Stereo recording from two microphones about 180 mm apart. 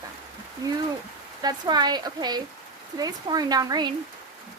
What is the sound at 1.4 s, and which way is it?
Speech, 20° right (ahead or behind).